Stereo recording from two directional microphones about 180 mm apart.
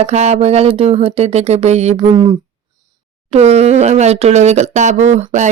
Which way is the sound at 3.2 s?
35° right (ahead or behind).